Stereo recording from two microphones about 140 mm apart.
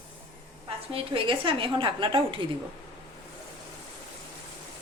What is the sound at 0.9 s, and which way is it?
A woman's voice, 40° right (ahead or behind).